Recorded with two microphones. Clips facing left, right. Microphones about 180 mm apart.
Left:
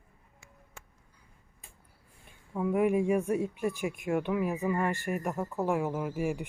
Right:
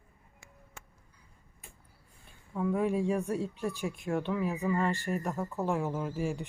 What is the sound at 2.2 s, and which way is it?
Speech, 15° left (ahead or behind).